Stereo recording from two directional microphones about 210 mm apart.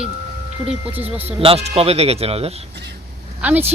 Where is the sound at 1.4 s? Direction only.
30° right (ahead or behind).